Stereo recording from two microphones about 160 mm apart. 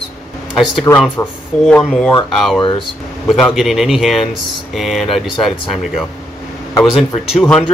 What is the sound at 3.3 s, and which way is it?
Speech, centre (ahead or behind).